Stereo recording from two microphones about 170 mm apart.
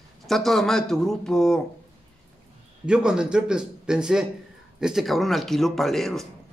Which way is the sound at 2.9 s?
5° right (ahead or behind).